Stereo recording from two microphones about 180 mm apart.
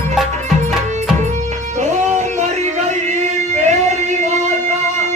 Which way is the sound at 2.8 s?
40° right (ahead or behind).